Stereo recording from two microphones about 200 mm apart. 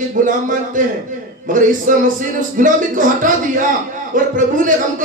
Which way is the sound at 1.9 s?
40° right (ahead or behind).